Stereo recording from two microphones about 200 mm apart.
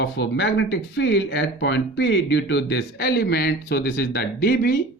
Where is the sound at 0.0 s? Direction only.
60° left (ahead or behind).